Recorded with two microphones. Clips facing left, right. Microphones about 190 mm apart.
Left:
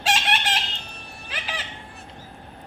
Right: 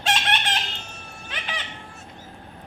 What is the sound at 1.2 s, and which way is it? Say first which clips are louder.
Music: even; 5° left (ahead or behind).